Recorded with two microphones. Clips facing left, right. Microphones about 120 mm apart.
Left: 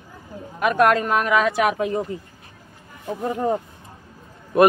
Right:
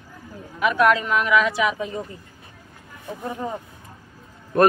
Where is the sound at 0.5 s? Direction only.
45° left (ahead or behind); by 2.0 s 60° left (ahead or behind).